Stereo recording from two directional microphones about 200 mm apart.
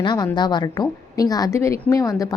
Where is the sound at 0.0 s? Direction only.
20° left (ahead or behind).